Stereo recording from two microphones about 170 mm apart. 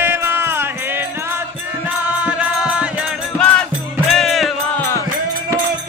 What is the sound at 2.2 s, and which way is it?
Music, 5° right (ahead or behind).